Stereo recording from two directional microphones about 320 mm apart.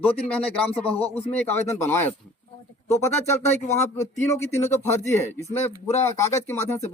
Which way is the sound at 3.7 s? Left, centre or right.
Centre.